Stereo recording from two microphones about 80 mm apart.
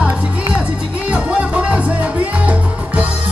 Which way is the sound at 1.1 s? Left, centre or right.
Centre.